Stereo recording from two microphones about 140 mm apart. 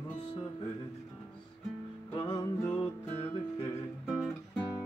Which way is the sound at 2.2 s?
25° left (ahead or behind).